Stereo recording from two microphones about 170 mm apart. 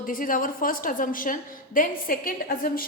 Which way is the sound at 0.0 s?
55° left (ahead or behind).